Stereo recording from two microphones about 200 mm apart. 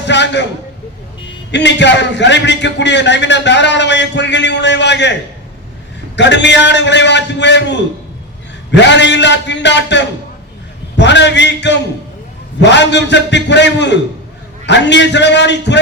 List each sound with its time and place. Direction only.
0.0 s a man's voice: 60° left (ahead or behind)
1.5 s a man's voice: 60° left (ahead or behind)
6.1 s a man's voice: 60° left (ahead or behind)